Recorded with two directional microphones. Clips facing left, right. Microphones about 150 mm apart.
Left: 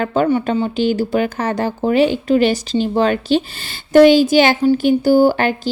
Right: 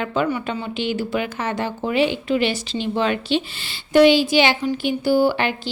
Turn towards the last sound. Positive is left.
turn(degrees=45)  # may be behind; listen again after turning